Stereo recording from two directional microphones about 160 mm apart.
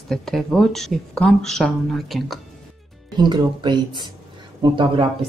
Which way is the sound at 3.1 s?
30° right (ahead or behind).